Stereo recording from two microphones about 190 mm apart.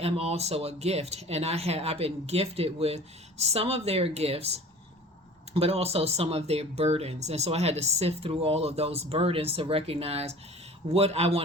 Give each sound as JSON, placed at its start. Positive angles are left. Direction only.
{"t": 0.0, "sound": "speech", "side_deg": -35}